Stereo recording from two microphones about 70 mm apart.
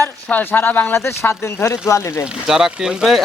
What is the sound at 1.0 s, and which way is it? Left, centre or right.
Speech, left.